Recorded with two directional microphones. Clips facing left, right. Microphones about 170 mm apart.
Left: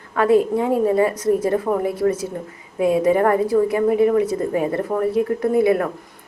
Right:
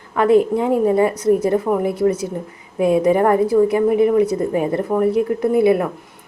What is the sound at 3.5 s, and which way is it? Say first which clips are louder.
A woman's voice: right 2 dB; 10° right (ahead or behind).